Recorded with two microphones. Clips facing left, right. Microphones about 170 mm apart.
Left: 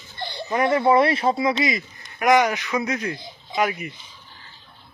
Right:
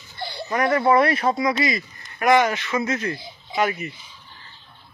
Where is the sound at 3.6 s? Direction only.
10° left (ahead or behind).